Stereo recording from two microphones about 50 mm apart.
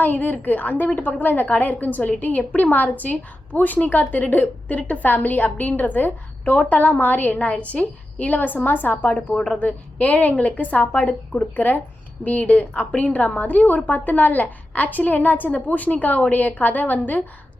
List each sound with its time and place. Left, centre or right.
0.0 s a woman's voice: left
7.3 s a woman's voice: left
9.3 s a woman's voice: centre
9.6 s a woman's voice: left